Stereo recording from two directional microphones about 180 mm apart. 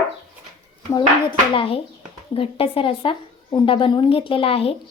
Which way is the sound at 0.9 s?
25° left (ahead or behind).